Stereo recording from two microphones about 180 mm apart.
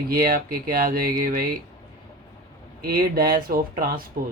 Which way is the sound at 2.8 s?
55° right (ahead or behind).